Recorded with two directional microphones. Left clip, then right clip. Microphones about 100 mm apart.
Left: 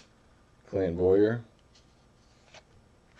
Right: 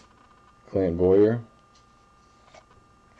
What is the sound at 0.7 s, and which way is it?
Speech, 10° right (ahead or behind).